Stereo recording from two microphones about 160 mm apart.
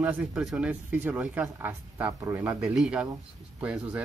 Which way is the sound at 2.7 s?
Centre (ahead or behind).